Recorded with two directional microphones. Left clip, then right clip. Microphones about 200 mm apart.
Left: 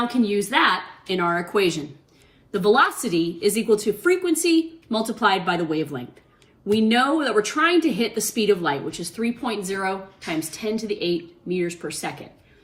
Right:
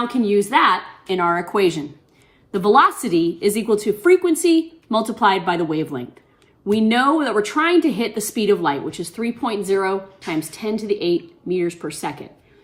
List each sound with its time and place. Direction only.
0.6 s a woman's voice: 35° right (ahead or behind)
2.5 s a woman's voice: 50° right (ahead or behind)